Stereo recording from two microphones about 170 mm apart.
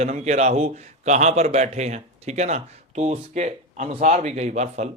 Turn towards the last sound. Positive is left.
turn(degrees=-40)  # may be behind; listen again after turning